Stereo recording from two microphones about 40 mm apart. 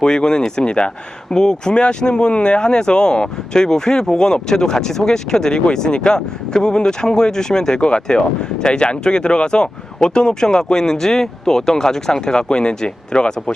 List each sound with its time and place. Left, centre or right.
0.0 s speech: centre